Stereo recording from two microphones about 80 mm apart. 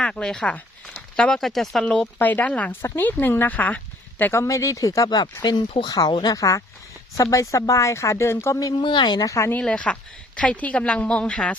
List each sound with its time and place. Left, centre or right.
0.0 s speech: centre
1.8 s a woman's voice: centre
4.2 s speech: left
5.1 s speech: left
5.9 s speech: left
6.3 s speech: left
8.8 s speech: left
9.2 s speech: left
9.6 s a woman's voice: centre